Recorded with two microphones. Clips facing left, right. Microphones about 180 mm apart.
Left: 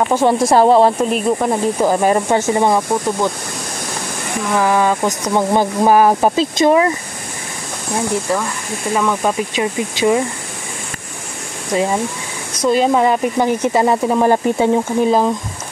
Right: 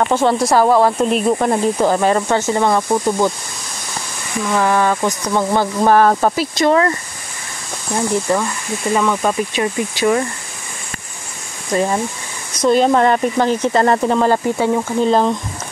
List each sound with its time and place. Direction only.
0.0 s speech: 15° left (ahead or behind)
1.1 s speech: 5° left (ahead or behind)
4.5 s speech: 10° left (ahead or behind)
8.3 s speech: centre (ahead or behind)
11.7 s speech: 15° left (ahead or behind)
15.0 s speech: 5° left (ahead or behind)